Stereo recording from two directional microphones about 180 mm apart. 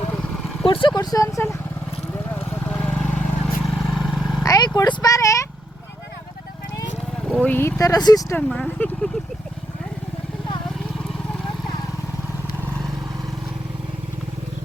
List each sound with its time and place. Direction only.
0.6 s speech: 30° left (ahead or behind)
2.3 s vehicle: 10° left (ahead or behind)
4.4 s speech: 20° left (ahead or behind)
7.3 s a sound: centre (ahead or behind)
7.5 s speech: 10° left (ahead or behind)
8.4 s speech: 5° left (ahead or behind)